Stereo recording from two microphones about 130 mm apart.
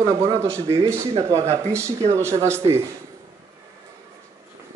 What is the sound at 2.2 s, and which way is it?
Speech, 20° right (ahead or behind).